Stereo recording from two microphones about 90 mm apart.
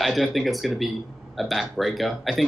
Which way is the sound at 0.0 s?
Centre (ahead or behind).